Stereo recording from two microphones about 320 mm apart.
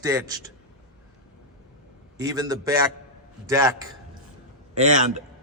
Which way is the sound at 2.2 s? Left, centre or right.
Centre.